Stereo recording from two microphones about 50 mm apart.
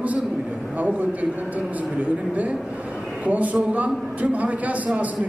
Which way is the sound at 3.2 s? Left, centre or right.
Right.